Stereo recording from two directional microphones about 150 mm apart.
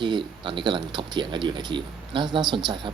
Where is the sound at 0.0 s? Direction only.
30° right (ahead or behind).